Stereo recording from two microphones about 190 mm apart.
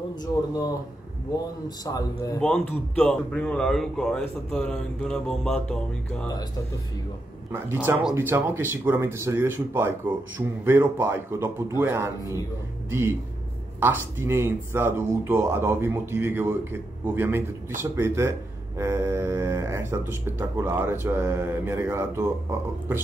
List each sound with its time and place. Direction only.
0.1 s a man's voice: 20° left (ahead or behind)
2.4 s a man's voice: 5° left (ahead or behind)
7.5 s speech: 10° right (ahead or behind)
13.7 s speech: 10° right (ahead or behind)